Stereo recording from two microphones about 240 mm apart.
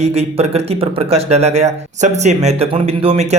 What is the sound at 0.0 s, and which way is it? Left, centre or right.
Speech, right.